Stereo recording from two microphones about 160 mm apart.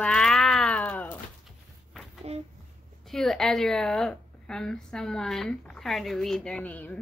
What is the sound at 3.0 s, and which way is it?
A woman's voice, centre (ahead or behind).